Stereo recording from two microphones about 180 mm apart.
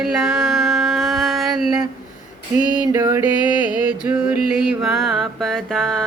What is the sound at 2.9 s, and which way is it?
Music, 20° right (ahead or behind).